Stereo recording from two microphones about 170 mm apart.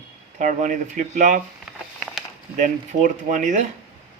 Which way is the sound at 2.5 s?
45° right (ahead or behind).